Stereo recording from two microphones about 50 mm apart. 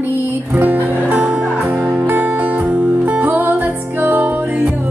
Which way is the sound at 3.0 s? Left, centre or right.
Right.